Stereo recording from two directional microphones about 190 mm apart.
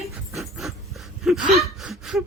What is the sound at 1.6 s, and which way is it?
Speech, centre (ahead or behind).